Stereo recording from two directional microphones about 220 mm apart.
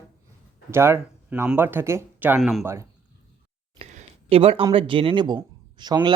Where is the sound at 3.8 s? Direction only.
30° right (ahead or behind).